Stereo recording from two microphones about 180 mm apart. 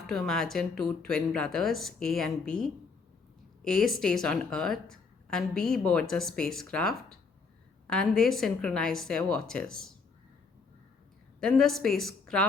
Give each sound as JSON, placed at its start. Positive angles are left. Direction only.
{"t": 0.1, "sound": "speech", "side_deg": 0}
{"t": 11.3, "sound": "speech", "side_deg": 5}